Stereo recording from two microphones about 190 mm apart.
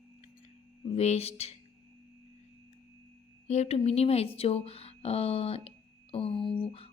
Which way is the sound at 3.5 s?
35° left (ahead or behind).